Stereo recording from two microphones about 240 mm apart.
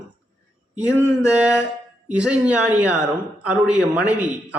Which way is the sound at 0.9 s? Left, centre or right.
Centre.